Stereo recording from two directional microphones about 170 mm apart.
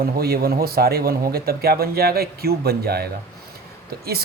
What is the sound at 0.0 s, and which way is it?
Speech, 65° right (ahead or behind).